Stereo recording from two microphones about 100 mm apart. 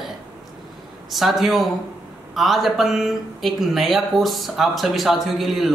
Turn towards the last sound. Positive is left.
turn(degrees=0)  # may be behind; listen again after turning